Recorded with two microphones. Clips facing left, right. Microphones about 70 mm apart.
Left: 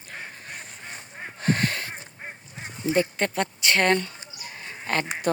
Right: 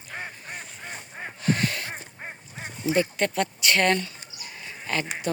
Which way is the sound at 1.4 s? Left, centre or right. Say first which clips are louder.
Left 1 dB; left.